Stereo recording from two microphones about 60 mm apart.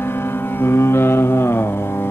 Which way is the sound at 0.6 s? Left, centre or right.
Left.